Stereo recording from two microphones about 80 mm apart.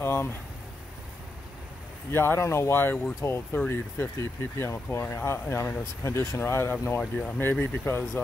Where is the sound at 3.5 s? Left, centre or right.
Left.